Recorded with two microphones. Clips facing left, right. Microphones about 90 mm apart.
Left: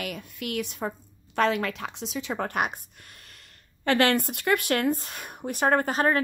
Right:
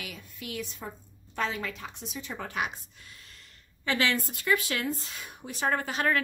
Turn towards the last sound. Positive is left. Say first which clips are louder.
# left 6 dB
turn(degrees=45)  # may be behind; listen again after turning